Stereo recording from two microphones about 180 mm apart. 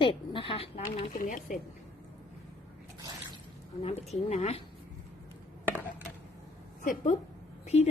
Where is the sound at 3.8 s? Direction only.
35° left (ahead or behind).